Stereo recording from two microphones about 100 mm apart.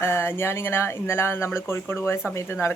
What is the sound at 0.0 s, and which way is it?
A man's voice, 25° left (ahead or behind).